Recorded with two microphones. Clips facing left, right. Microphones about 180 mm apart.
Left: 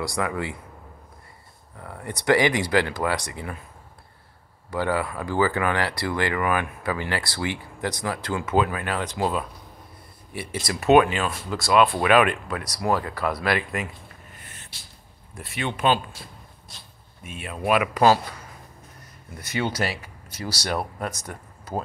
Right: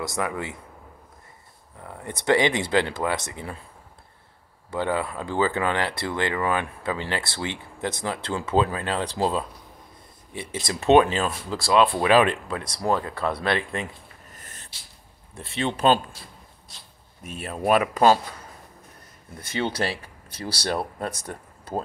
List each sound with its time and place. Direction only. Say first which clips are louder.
0.0 s speech: left 1 dB; 20° right (ahead or behind)
1.8 s speech: left 1 dB; 20° right (ahead or behind)
4.6 s speech: left 1 dB; 20° right (ahead or behind)
14.3 s a sound: even; 40° right (ahead or behind)
15.3 s speech: right 3 dB; 30° right (ahead or behind)
17.4 s speech: right 1 dB; 40° right (ahead or behind)
17.9 s speech: left 1 dB; 25° right (ahead or behind)
19.4 s speech: even; 30° right (ahead or behind)